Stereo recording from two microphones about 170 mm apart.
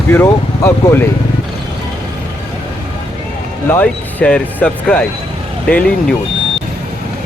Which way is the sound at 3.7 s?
5° left (ahead or behind).